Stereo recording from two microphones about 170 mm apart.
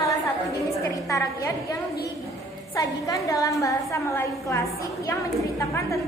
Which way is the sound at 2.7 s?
20° left (ahead or behind).